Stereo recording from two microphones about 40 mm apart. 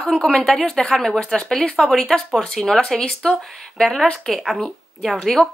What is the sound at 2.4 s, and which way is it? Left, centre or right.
Speech, centre.